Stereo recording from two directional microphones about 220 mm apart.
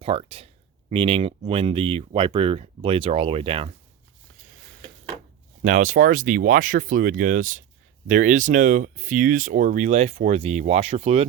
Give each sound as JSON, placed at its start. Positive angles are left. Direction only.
{"t": 0.0, "sound": "speech", "side_deg": -25}
{"t": 5.6, "sound": "speech", "side_deg": -35}